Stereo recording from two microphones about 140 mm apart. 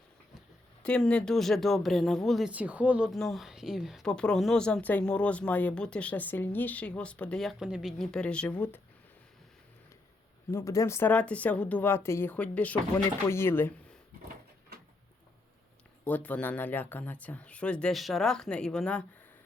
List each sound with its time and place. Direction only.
0.8 s speech: 5° left (ahead or behind)
2.5 s a woman's voice: 10° right (ahead or behind); by 8.8 s 10° left (ahead or behind)
10.5 s a woman's voice: 20° left (ahead or behind)
16.0 s a woman's voice: 10° left (ahead or behind)